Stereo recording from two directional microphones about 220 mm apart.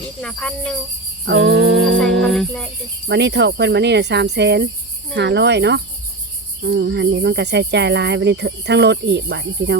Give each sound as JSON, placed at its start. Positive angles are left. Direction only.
{"t": 0.2, "sound": "cricket", "side_deg": 5}
{"t": 1.2, "sound": "music", "side_deg": -55}
{"t": 2.2, "sound": "cricket", "side_deg": 0}
{"t": 3.1, "sound": "cricket", "side_deg": -50}